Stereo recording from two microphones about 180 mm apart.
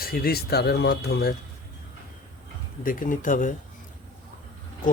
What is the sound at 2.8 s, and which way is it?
Speech, 50° left (ahead or behind).